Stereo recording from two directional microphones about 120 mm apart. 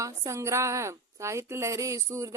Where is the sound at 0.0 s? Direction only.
25° right (ahead or behind).